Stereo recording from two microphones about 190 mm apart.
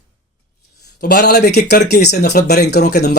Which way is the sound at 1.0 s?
55° left (ahead or behind).